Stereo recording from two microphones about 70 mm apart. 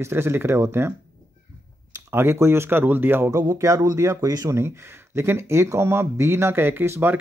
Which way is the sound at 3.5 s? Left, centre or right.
Right.